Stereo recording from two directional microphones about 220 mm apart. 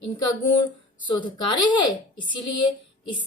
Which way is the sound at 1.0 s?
20° left (ahead or behind).